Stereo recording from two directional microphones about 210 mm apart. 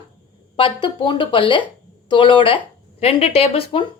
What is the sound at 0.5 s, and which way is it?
A woman's voice, 25° left (ahead or behind).